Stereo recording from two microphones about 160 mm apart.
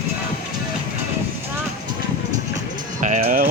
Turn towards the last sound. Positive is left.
turn(degrees=-55)  # may be behind; listen again after turning